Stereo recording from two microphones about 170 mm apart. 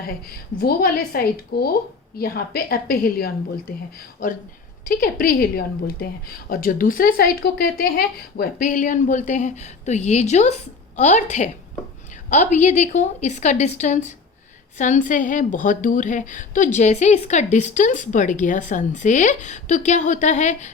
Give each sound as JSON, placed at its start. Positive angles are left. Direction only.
{"t": 0.1, "sound": "a woman's voice", "side_deg": 65}
{"t": 4.9, "sound": "a woman's voice", "side_deg": 60}